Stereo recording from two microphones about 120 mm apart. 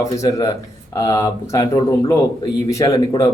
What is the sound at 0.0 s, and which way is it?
A man's voice, 30° left (ahead or behind).